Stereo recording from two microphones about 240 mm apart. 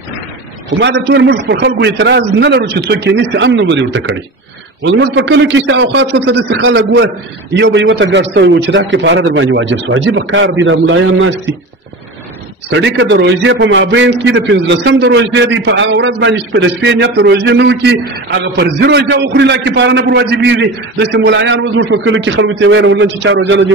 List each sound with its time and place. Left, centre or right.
0.7 s a man's voice: right
12.7 s a man's voice: right